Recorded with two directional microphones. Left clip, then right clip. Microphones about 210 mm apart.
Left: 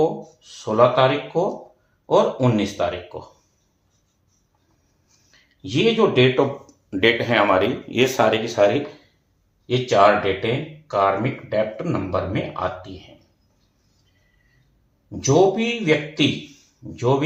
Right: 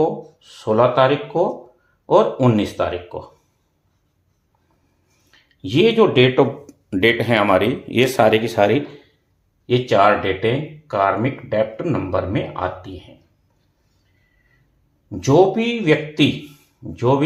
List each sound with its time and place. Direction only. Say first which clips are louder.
0.0 s speech: right 1 dB; 45° right (ahead or behind)
5.3 s a sound: right 2 dB; 45° right (ahead or behind)
5.6 s speech: right 4 dB; 45° right (ahead or behind)
9.6 s speech: right 1 dB; 45° right (ahead or behind)
15.2 s speech: right 2 dB; 45° right (ahead or behind)